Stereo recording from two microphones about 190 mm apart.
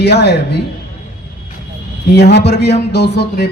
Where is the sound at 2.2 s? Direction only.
60° left (ahead or behind).